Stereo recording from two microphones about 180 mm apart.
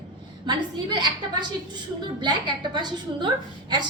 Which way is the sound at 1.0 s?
25° right (ahead or behind).